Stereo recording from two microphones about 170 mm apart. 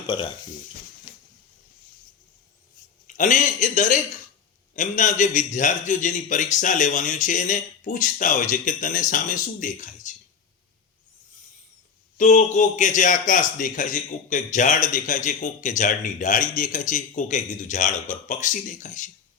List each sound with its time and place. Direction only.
0.1 s speech: 25° left (ahead or behind)
1.1 s a sound: 30° left (ahead or behind)
3.1 s a man's voice: 50° left (ahead or behind)
12.1 s a man's voice: 45° left (ahead or behind)